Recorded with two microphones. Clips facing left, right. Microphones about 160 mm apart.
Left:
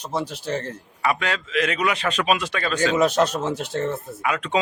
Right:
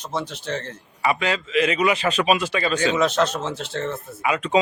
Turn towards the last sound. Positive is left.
turn(degrees=-5)  # may be behind; listen again after turning